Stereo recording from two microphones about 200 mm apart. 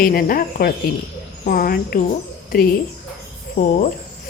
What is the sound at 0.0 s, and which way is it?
A woman's voice, 45° left (ahead or behind).